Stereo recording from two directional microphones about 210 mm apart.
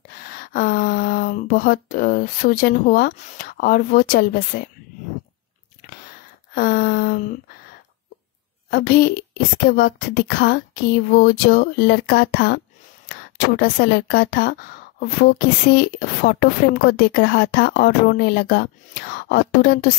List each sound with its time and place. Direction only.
0.1 s a sound: 45° left (ahead or behind)
6.5 s a woman's voice: 40° left (ahead or behind)
8.6 s a woman's voice: 45° left (ahead or behind)